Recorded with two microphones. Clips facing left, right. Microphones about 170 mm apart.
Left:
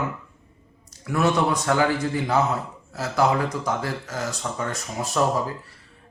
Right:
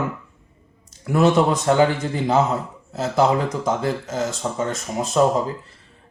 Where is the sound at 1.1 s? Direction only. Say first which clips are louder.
Right 5 dB; 25° right (ahead or behind).